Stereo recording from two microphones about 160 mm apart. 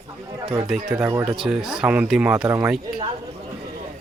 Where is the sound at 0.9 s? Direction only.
15° right (ahead or behind).